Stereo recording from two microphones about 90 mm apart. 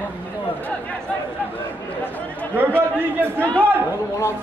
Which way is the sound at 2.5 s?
25° right (ahead or behind).